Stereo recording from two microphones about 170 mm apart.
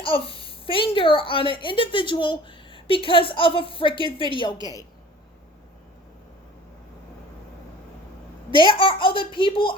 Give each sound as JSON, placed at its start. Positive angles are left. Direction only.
{"t": 0.0, "sound": "a child's voice", "side_deg": 30}
{"t": 8.5, "sound": "speech", "side_deg": 30}